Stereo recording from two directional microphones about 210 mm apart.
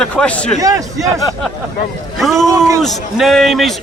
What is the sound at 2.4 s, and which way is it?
Speech, 15° right (ahead or behind).